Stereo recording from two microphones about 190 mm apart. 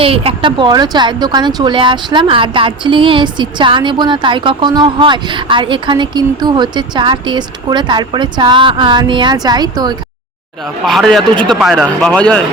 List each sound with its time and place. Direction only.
0.0 s speech: 30° right (ahead or behind)
10.8 s speech: centre (ahead or behind)